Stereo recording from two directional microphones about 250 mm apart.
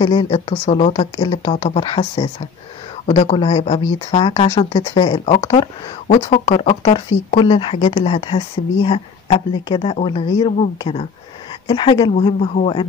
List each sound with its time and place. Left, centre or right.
0.0 s speech: centre